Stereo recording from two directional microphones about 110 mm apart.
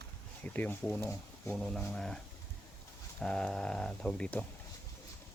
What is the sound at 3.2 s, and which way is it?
Speech, 10° left (ahead or behind).